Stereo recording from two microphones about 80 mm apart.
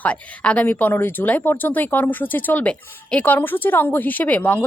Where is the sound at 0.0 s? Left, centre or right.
Centre.